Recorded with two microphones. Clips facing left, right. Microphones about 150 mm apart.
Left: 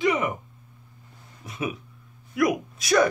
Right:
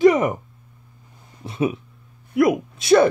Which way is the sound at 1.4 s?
30° right (ahead or behind).